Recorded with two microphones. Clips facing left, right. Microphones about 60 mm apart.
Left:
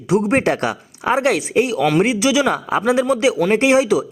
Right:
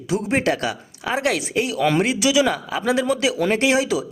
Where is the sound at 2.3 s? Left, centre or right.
Left.